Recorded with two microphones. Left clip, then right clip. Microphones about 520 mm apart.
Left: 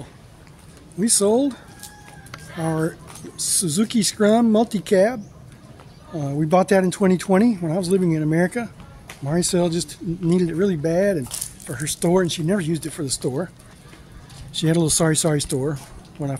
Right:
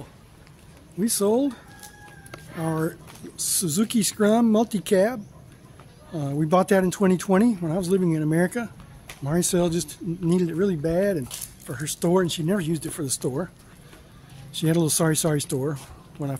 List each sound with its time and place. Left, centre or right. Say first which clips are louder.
0.9 s speech: left 4 dB; right
14.5 s speech: left 3 dB; right